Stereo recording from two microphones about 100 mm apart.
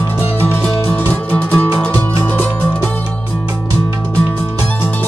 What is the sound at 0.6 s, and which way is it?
Music, 10° left (ahead or behind).